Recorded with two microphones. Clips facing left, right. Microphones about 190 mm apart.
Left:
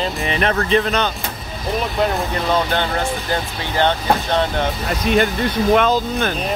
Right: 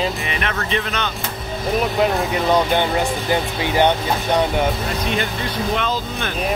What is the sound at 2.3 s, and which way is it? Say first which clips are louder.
Speech: right 2 dB; 15° right (ahead or behind).